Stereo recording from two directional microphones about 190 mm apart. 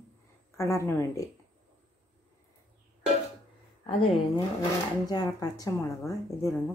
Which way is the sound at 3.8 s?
30° left (ahead or behind).